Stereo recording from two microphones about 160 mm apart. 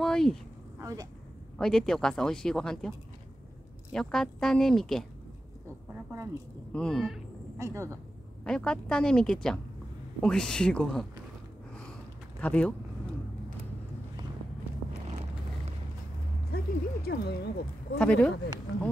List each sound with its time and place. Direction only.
0.0 s speech: 5° left (ahead or behind)
0.7 s vehicle: 20° right (ahead or behind)
1.6 s speech: 5° left (ahead or behind)
3.9 s speech: 5° left (ahead or behind)
6.7 s speech: 5° left (ahead or behind)
7.5 s speech: 20° right (ahead or behind)
8.5 s speech: 5° left (ahead or behind)
12.4 s speech: 10° left (ahead or behind)
16.5 s speech: 80° left
17.9 s speech: 5° left (ahead or behind)